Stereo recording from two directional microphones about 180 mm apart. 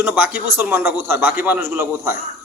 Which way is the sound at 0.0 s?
5° right (ahead or behind).